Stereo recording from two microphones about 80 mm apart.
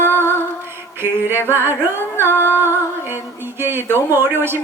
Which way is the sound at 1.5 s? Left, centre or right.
Right.